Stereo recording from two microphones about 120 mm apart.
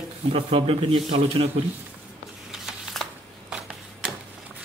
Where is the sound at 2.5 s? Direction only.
Centre (ahead or behind).